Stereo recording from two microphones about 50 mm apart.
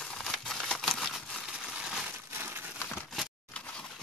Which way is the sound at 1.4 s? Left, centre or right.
Centre.